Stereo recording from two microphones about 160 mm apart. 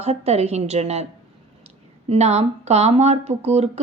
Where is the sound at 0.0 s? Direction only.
40° right (ahead or behind).